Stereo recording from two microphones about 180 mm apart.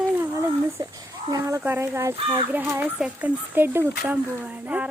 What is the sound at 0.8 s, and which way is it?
Speech, 20° right (ahead or behind).